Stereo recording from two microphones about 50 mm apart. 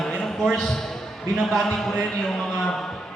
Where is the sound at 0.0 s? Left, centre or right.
Centre.